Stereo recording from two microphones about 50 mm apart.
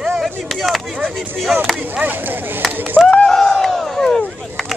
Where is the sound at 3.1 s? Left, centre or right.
Centre.